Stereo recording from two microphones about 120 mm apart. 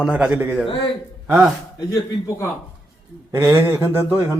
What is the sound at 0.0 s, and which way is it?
Speech, 10° right (ahead or behind).